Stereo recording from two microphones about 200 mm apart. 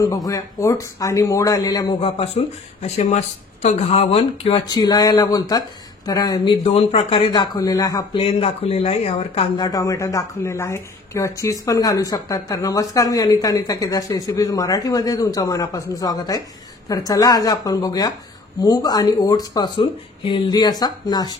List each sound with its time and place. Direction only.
0.0 s speech: 20° left (ahead or behind)
9.7 s speech: 15° left (ahead or behind)